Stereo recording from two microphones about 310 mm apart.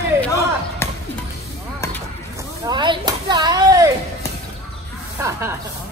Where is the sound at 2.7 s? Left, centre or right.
Centre.